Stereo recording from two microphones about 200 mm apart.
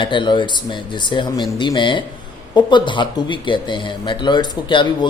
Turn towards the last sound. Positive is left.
turn(degrees=25)  # may be behind; listen again after turning